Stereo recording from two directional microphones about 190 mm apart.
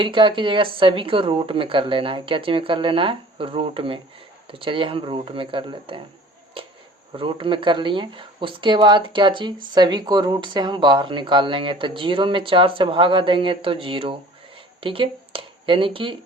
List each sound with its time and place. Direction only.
0.0 s speech: 25° right (ahead or behind)
7.2 s speech: 25° right (ahead or behind)